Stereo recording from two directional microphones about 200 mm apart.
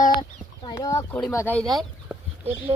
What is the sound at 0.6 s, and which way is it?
Speech, 15° left (ahead or behind).